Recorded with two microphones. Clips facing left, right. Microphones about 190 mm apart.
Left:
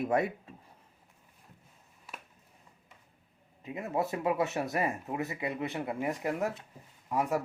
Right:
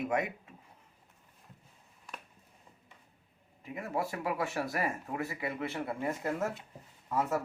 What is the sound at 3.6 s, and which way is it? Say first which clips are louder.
Speech: left 3 dB; 20° left (ahead or behind).